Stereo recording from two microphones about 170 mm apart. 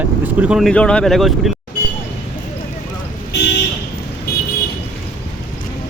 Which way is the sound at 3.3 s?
85° left.